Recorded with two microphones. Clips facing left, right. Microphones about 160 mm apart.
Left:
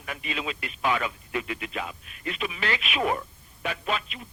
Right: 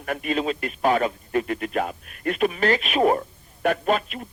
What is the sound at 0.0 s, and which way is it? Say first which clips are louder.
A man's voice: right 9 dB; 50° right (ahead or behind).